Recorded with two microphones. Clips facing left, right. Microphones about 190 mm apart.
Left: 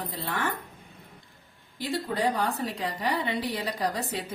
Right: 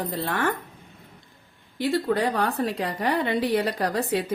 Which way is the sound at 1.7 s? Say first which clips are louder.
Right 6 dB; 60° right (ahead or behind).